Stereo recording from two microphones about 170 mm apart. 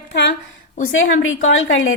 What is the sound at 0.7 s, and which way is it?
Speech, 50° left (ahead or behind).